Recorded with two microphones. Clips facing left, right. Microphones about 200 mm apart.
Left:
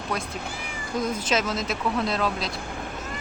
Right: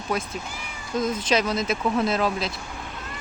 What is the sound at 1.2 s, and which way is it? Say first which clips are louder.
Speech: right 3 dB; 5° left (ahead or behind).